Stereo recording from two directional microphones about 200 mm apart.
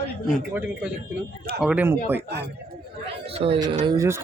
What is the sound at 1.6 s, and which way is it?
Speech, 5° right (ahead or behind).